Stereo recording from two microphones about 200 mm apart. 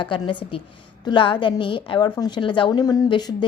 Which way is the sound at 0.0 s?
25° left (ahead or behind).